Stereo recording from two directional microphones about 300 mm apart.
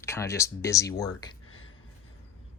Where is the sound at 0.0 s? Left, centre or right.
Centre.